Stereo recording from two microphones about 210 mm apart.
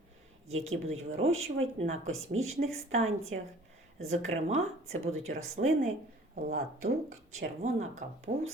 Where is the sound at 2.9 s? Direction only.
30° right (ahead or behind).